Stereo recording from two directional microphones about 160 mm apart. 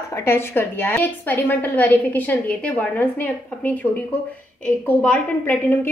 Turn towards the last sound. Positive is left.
turn(degrees=10)  # may be behind; listen again after turning